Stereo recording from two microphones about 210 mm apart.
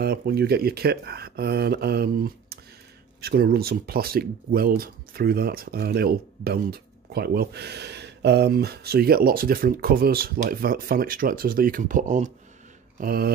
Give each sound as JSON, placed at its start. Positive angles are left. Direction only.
{"t": 0.0, "sound": "speech", "side_deg": -50}